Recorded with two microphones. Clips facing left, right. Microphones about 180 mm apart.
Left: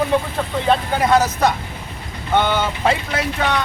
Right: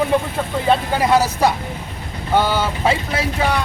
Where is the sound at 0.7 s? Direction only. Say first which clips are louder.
Even; 5° right (ahead or behind).